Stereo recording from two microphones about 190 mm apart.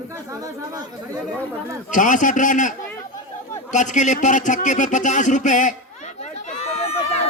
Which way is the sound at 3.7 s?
40° left (ahead or behind).